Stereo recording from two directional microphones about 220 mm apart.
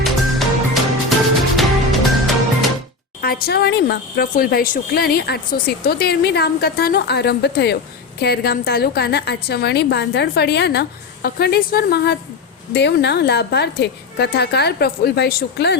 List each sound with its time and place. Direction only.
0.0 s music: centre (ahead or behind)
3.2 s a woman's voice: 45° left (ahead or behind)